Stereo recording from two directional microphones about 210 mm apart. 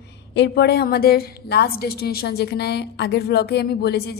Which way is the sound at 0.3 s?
55° left (ahead or behind).